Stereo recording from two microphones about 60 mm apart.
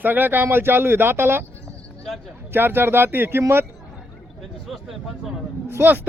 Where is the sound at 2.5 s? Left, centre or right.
Right.